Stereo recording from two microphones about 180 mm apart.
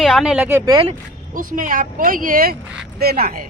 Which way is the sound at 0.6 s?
25° right (ahead or behind).